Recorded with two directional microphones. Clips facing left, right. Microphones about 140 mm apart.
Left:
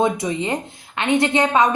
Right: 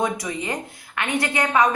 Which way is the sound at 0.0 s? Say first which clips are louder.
Left 5 dB; 25° left (ahead or behind).